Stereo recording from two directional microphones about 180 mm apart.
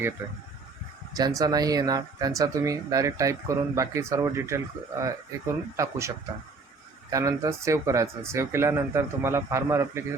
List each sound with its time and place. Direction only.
1.1 s speech: 20° right (ahead or behind)